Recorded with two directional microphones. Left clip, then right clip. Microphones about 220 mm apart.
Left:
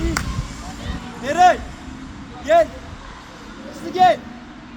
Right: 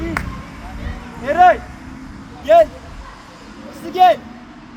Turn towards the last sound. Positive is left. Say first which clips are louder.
# right 3 dB
turn(degrees=-35)  # may be behind; listen again after turning